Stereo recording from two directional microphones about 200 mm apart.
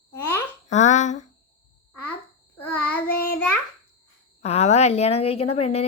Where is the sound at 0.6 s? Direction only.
35° left (ahead or behind).